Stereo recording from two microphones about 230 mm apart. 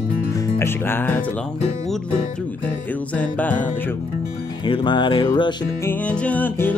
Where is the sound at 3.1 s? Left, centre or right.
Centre.